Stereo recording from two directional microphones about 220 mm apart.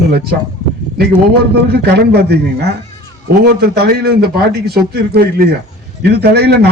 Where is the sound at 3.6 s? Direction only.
45° right (ahead or behind).